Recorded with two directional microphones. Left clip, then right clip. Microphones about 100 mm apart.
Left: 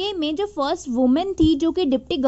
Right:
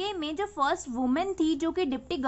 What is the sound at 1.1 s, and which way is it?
Speech, 45° left (ahead or behind).